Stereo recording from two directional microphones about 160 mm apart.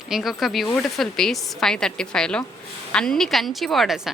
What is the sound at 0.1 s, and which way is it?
A woman's voice, centre (ahead or behind).